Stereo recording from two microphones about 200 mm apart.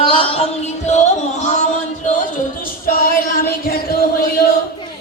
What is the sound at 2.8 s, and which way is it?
Music, 45° left (ahead or behind).